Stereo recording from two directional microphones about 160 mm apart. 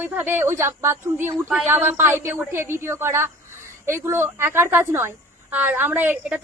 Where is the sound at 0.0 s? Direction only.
10° right (ahead or behind).